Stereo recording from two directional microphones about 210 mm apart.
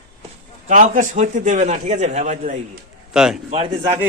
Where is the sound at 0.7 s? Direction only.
40° right (ahead or behind).